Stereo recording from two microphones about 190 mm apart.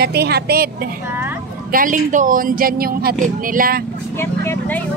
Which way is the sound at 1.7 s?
45° right (ahead or behind).